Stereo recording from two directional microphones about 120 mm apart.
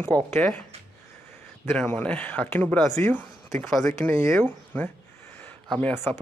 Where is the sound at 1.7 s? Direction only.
20° left (ahead or behind).